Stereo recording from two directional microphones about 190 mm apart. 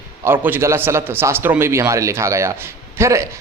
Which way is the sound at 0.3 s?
10° right (ahead or behind).